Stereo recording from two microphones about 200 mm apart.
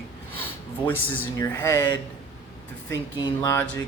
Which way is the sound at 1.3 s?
15° left (ahead or behind).